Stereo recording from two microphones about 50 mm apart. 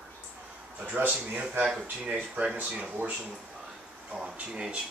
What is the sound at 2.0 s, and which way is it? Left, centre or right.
Speech, right.